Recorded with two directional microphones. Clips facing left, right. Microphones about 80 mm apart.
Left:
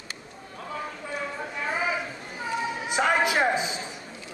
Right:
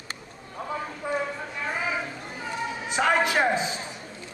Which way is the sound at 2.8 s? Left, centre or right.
Centre.